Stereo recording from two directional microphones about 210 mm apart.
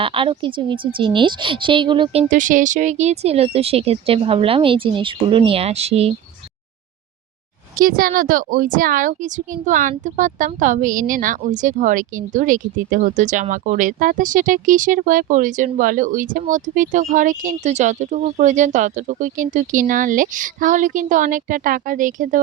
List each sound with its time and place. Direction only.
0.0 s speech: 25° right (ahead or behind)
2.3 s speech: 40° right (ahead or behind)
7.8 s speech: 40° right (ahead or behind)